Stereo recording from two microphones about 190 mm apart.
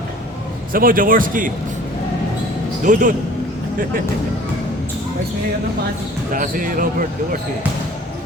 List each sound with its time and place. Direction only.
0.7 s a man's voice: 50° right (ahead or behind)
2.8 s a man's voice: 45° right (ahead or behind)
6.3 s a man's voice: 45° right (ahead or behind)